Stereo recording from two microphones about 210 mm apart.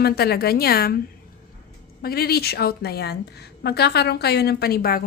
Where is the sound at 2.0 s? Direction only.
45° left (ahead or behind).